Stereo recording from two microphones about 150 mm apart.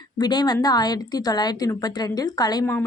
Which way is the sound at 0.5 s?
25° left (ahead or behind).